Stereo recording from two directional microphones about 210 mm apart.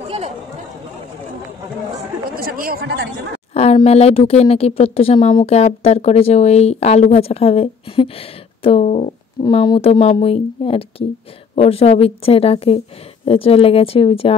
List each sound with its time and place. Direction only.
2.3 s speech: 45° right (ahead or behind)
3.5 s a woman's voice: 30° left (ahead or behind)